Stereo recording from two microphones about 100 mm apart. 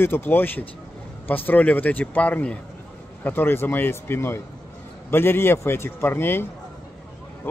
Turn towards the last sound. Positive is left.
turn(degrees=20)  # may be behind; listen again after turning